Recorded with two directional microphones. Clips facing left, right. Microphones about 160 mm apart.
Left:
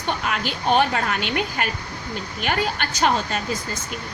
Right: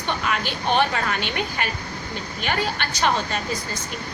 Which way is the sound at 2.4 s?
45° left (ahead or behind).